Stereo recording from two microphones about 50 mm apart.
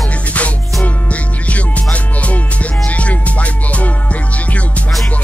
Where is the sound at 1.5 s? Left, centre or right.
Left.